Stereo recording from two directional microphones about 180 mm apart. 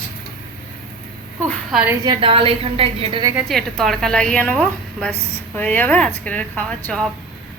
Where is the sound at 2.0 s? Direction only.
30° right (ahead or behind).